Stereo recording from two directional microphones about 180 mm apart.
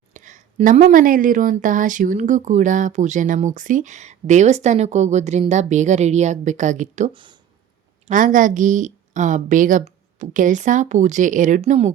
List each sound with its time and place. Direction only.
0.1 s speech: 45° right (ahead or behind)
7.1 s speech: 25° right (ahead or behind)
8.0 s speech: 45° right (ahead or behind)